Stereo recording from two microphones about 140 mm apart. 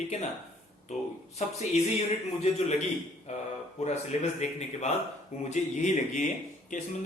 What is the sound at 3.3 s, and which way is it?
Speech, 55° left (ahead or behind).